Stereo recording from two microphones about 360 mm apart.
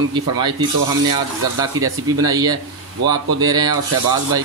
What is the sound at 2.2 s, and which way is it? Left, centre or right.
Speech, centre.